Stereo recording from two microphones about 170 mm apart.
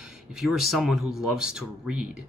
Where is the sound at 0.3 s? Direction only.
Centre (ahead or behind).